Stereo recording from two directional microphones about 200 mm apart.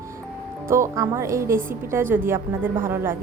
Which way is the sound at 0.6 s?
15° right (ahead or behind).